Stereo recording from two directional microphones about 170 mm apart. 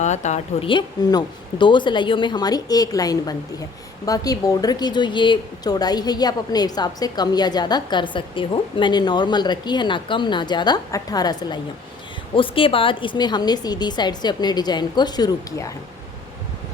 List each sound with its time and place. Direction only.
0.0 s speech: 45° left (ahead or behind)
0.7 s speech: 30° left (ahead or behind)